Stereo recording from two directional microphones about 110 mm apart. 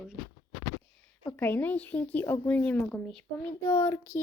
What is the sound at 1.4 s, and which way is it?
A child's voice, 15° left (ahead or behind).